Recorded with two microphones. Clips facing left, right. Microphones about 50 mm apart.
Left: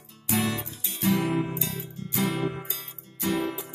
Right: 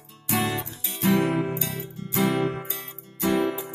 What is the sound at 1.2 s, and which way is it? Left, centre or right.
Music, right.